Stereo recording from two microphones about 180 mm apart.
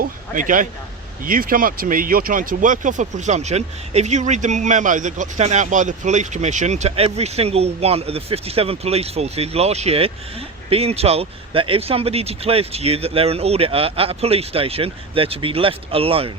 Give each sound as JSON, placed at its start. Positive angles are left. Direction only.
{"t": 0.3, "sound": "speech", "side_deg": -45}